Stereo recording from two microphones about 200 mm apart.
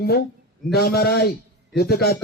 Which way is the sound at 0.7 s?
50° left (ahead or behind).